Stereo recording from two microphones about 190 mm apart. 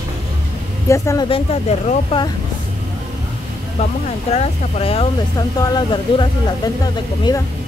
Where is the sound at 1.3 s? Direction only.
30° left (ahead or behind).